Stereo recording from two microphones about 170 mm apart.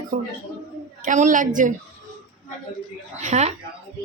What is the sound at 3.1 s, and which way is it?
Speech, 45° right (ahead or behind).